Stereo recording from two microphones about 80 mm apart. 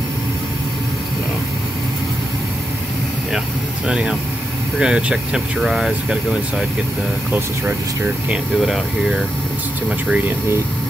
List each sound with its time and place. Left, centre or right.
3.8 s speech: centre
8.5 s speech: centre
9.8 s speech: centre